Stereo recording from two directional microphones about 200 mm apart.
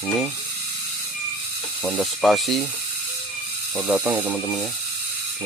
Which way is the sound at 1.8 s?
Centre (ahead or behind).